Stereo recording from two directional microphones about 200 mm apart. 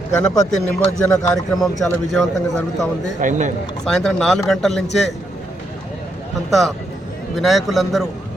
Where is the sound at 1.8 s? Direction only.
5° left (ahead or behind).